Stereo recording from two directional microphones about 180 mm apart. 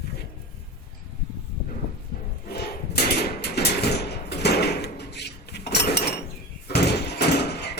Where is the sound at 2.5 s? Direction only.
65° left (ahead or behind).